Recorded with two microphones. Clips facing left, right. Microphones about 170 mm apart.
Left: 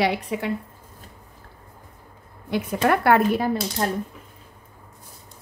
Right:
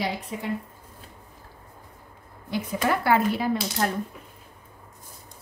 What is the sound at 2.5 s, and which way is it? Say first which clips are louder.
Speech: left 4 dB; 60° left (ahead or behind).